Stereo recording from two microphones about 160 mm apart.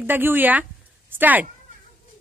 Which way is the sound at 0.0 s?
10° right (ahead or behind).